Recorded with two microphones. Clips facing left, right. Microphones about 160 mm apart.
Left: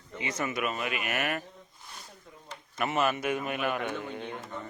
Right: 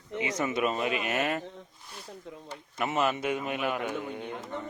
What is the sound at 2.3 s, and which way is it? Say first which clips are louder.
Speech: right 8 dB; 90° right.